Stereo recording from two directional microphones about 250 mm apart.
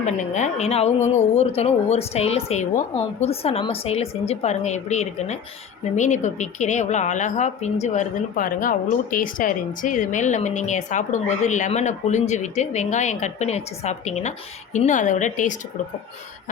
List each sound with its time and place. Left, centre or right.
0.0 s speech: left